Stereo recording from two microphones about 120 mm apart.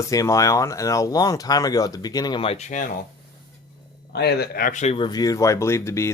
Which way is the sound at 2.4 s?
55° left (ahead or behind).